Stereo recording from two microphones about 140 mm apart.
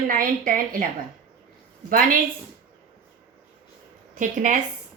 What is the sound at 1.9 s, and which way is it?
Speech, 80° right.